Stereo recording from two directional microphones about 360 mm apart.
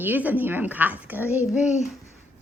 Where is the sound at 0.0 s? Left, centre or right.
Centre.